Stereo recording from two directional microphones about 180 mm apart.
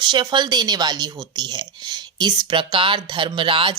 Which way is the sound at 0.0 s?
25° right (ahead or behind).